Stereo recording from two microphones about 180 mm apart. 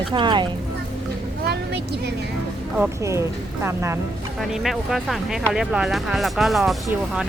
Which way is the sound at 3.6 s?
15° right (ahead or behind).